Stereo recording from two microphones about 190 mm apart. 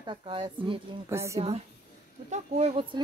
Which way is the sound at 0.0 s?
25° right (ahead or behind).